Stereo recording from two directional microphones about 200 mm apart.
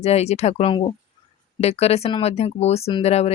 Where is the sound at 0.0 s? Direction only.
30° left (ahead or behind).